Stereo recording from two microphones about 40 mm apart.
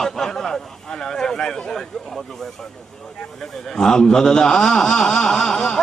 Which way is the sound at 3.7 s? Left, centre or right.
Centre.